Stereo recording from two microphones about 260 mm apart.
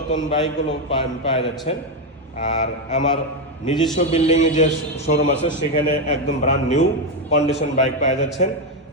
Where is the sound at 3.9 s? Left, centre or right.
Left.